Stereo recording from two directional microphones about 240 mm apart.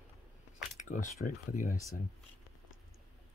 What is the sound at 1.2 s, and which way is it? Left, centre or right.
Speech, left.